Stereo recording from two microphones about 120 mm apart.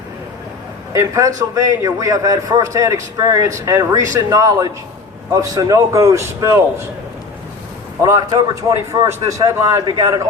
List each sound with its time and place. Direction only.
0.9 s a man's voice: 25° right (ahead or behind)
8.0 s a man's voice: 25° right (ahead or behind)
9.9 s a man's voice: 40° right (ahead or behind)